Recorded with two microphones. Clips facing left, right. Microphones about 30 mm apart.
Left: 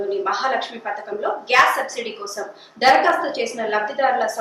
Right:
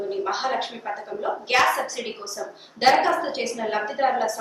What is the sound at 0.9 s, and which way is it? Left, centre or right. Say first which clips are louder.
Speech: left 5 dB; left.